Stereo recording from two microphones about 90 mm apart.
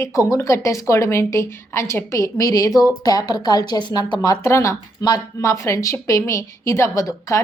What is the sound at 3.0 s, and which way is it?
A woman's voice, 50° left (ahead or behind).